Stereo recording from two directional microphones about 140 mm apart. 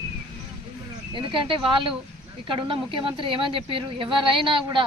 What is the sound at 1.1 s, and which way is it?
Speech, 35° right (ahead or behind).